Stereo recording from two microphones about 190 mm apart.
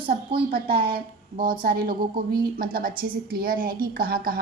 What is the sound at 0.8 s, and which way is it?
A woman's voice, 50° right (ahead or behind).